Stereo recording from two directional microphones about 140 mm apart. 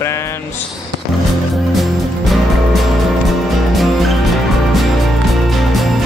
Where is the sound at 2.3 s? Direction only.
Centre (ahead or behind).